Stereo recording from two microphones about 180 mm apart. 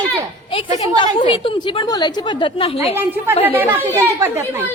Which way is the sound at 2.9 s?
10° right (ahead or behind).